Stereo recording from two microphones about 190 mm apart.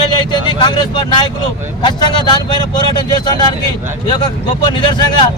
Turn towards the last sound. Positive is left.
turn(degrees=25)  # may be behind; listen again after turning